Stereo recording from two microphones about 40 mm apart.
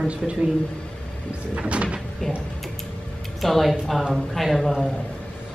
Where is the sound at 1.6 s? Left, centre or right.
Right.